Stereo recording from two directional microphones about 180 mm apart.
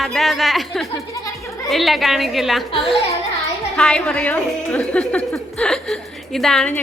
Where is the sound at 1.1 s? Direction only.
20° left (ahead or behind).